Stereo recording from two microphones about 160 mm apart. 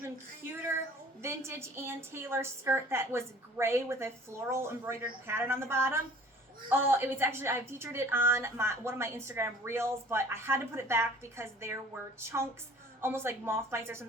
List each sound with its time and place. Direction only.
1.2 s a woman's voice: 15° right (ahead or behind)